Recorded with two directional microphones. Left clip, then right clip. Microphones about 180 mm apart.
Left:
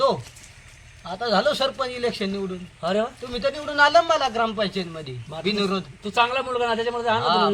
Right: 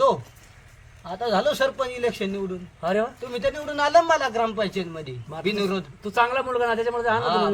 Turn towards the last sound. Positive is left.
turn(degrees=-5)  # may be behind; listen again after turning